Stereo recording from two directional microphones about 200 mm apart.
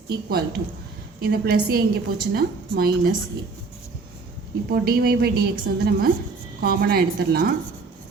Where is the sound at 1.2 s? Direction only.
50° right (ahead or behind).